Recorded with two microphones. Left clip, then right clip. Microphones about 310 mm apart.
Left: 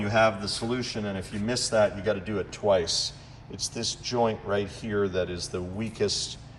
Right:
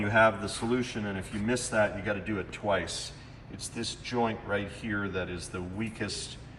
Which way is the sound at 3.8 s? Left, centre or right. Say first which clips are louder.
Left 3 dB; centre.